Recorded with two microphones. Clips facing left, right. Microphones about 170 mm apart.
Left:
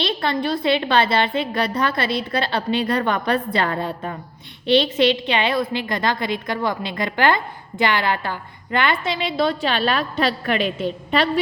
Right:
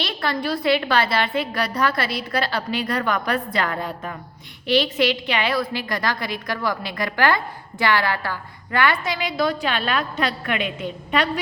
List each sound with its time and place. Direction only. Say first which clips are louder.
0.0 s a woman's voice: left 3 dB; 25° left (ahead or behind)